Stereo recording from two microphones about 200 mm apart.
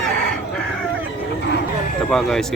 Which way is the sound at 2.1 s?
Centre (ahead or behind).